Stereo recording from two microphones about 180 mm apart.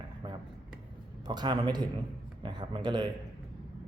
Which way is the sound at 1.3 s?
25° right (ahead or behind).